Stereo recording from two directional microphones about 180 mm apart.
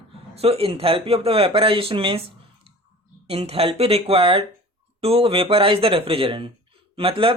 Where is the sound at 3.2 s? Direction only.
35° right (ahead or behind).